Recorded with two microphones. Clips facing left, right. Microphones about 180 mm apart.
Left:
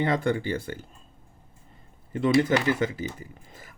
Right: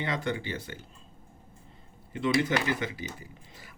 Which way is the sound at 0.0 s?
50° left (ahead or behind).